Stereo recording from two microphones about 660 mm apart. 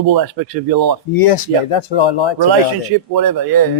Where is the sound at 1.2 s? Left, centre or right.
Left.